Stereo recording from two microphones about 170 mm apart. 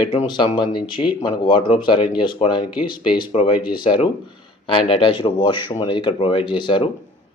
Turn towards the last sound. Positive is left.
turn(degrees=30)  # may be behind; listen again after turning